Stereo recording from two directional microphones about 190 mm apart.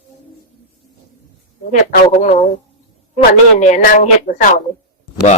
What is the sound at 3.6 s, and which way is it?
Speech, 40° left (ahead or behind).